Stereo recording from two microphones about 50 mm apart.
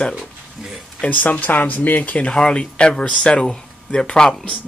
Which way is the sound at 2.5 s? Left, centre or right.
Centre.